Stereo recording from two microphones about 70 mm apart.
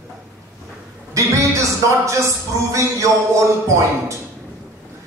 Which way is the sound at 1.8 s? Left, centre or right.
Right.